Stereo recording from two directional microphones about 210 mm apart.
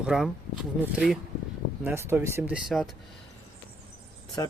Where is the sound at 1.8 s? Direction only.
10° right (ahead or behind).